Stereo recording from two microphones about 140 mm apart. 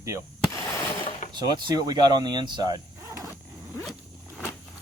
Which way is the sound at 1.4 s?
30° right (ahead or behind).